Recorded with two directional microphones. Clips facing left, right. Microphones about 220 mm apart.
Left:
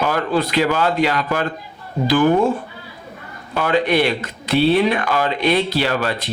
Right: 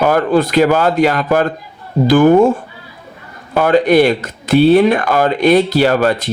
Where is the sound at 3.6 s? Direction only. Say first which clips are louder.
Right 7 dB; 45° right (ahead or behind).